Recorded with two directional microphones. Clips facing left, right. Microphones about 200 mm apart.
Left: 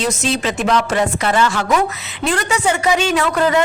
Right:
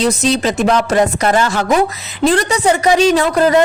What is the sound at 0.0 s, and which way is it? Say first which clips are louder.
Speech: right 5 dB; 35° right (ahead or behind).